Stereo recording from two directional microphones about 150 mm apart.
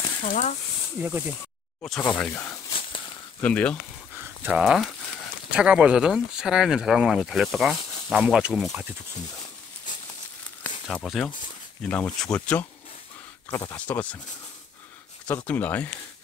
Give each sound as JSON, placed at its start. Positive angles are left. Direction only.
{"t": 0.2, "sound": "speech", "side_deg": 55}
{"t": 1.0, "sound": "speech", "side_deg": -20}
{"t": 1.8, "sound": "speech", "side_deg": 10}
{"t": 4.4, "sound": "speech", "side_deg": -10}
{"t": 10.6, "sound": "a sound", "side_deg": 5}
{"t": 11.9, "sound": "speech", "side_deg": 10}
{"t": 15.2, "sound": "speech", "side_deg": 10}